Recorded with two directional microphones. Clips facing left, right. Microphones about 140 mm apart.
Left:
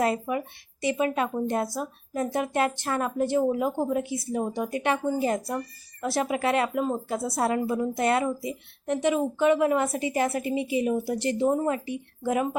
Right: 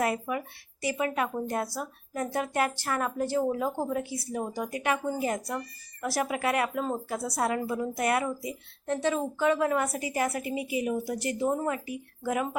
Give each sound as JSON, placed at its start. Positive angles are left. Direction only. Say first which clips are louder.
{"t": 0.0, "sound": "a woman's voice", "louder": "left 3 dB", "side_deg": 25}